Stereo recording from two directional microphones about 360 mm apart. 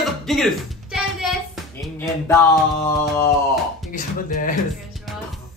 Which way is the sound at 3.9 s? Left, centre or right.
Left.